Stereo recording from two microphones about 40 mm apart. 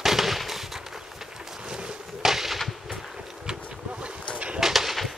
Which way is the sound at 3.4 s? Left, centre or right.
Right.